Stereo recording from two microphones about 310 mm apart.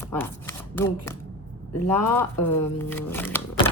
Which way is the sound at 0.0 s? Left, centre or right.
Centre.